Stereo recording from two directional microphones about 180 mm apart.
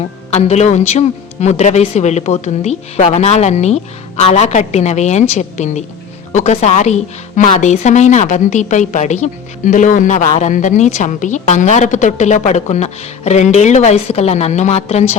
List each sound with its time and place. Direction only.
0.3 s speech: 35° left (ahead or behind)